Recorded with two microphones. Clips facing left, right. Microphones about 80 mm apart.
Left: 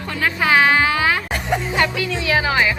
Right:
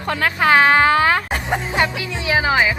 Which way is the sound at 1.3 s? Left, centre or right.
Centre.